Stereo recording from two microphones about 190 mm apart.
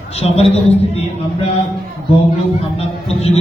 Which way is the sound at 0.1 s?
35° left (ahead or behind).